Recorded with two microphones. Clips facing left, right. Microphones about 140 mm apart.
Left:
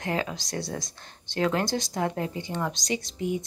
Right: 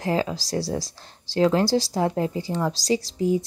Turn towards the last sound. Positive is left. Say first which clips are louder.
# right 7 dB
turn(degrees=-30)  # may be behind; listen again after turning